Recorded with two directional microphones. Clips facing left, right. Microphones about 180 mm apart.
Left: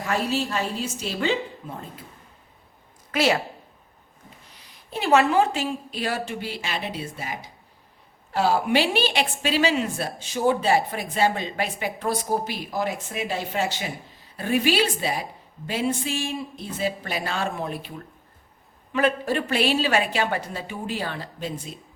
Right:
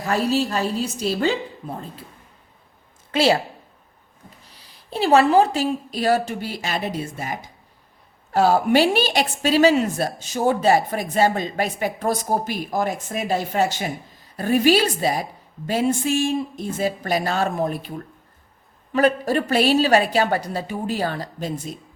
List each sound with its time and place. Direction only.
0.0 s a woman's voice: 35° right (ahead or behind)
3.1 s a woman's voice: 30° right (ahead or behind)
4.5 s a woman's voice: 30° right (ahead or behind)
18.9 s a woman's voice: 40° right (ahead or behind)